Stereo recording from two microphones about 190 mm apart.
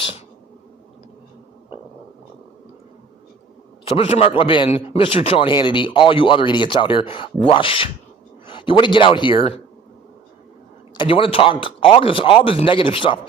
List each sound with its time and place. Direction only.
3.8 s a man's voice: 35° left (ahead or behind)
10.9 s a man's voice: 25° left (ahead or behind)